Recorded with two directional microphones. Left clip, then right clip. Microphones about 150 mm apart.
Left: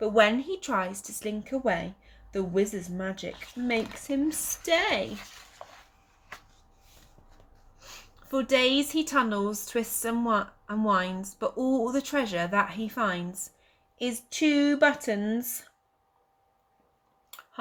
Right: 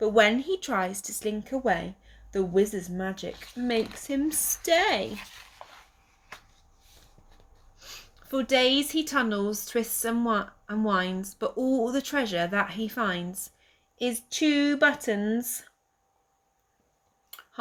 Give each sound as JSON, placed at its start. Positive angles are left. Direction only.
{"t": 0.0, "sound": "a woman's voice", "side_deg": -30}
{"t": 3.7, "sound": "speech", "side_deg": -30}
{"t": 5.6, "sound": "a sound", "side_deg": 10}
{"t": 7.8, "sound": "a woman's voice", "side_deg": -30}